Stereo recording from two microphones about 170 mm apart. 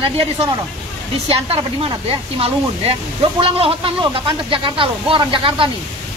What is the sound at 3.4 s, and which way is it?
Speech, 30° right (ahead or behind).